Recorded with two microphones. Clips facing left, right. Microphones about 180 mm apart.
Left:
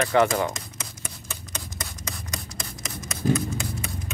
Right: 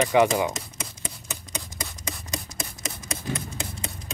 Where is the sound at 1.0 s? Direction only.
20° right (ahead or behind).